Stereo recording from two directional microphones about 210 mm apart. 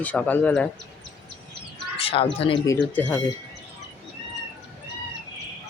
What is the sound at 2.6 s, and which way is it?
Speech, 10° left (ahead or behind).